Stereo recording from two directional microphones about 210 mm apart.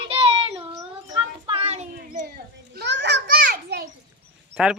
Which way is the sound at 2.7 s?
60° right (ahead or behind).